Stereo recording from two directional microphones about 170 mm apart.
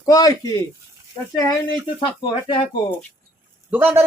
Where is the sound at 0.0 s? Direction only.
20° left (ahead or behind).